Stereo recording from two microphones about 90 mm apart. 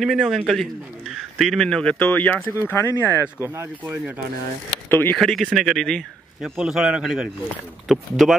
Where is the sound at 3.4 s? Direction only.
30° right (ahead or behind).